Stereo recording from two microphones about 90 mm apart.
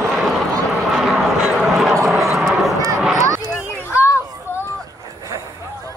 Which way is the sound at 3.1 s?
40° right (ahead or behind).